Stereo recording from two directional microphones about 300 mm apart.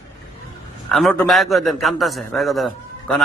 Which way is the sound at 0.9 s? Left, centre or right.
Centre.